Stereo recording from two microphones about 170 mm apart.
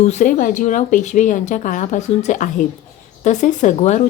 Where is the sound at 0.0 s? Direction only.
45° left (ahead or behind).